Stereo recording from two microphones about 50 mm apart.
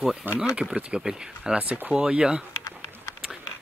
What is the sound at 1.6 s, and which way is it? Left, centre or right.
Speech, right.